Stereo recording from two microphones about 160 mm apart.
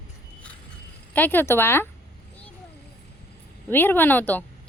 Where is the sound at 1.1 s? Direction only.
10° left (ahead or behind).